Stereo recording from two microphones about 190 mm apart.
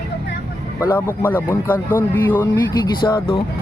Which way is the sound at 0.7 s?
10° left (ahead or behind).